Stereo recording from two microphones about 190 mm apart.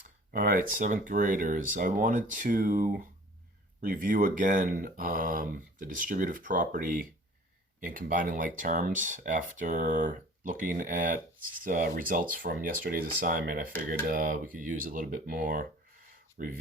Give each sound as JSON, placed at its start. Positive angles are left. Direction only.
{"t": 0.3, "sound": "speech", "side_deg": -45}